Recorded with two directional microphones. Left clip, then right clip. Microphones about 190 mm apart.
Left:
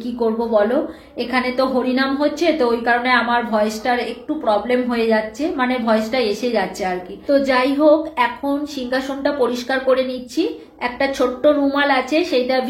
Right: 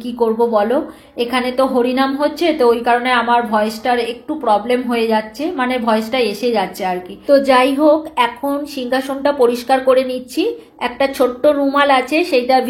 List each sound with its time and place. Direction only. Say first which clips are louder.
0.5 s a woman's voice: right 1 dB; 25° right (ahead or behind)
7.2 s a woman's voice: right 5 dB; 40° right (ahead or behind)